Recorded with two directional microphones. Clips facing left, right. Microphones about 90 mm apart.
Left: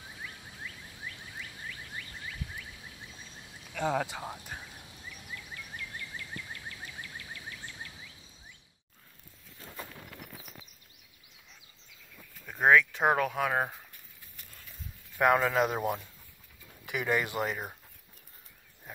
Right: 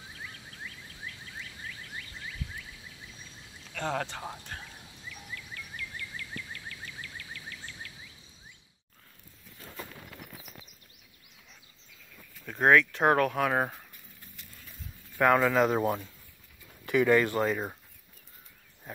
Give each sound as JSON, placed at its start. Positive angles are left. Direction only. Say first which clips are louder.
{"t": 3.7, "sound": "speech", "louder": "left 2 dB", "side_deg": 10}
{"t": 5.3, "sound": "a sound", "louder": "even", "side_deg": 25}
{"t": 12.4, "sound": "speech", "louder": "right 1 dB", "side_deg": 0}
{"t": 15.1, "sound": "speech", "louder": "right 2 dB", "side_deg": 15}